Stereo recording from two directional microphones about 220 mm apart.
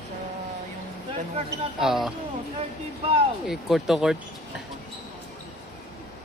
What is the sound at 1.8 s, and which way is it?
Speech, centre (ahead or behind).